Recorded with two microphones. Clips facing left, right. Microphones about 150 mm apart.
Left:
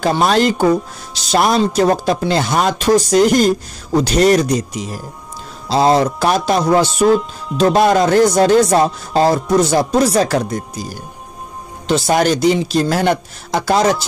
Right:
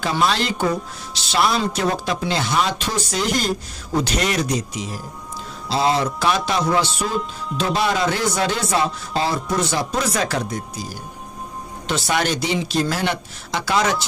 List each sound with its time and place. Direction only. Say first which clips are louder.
0.0 s speech: left 7 dB; 45° left (ahead or behind)
11.9 s speech: left 7 dB; 40° left (ahead or behind)